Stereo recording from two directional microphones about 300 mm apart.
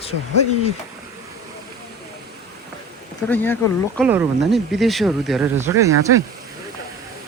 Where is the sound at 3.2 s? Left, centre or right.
Centre.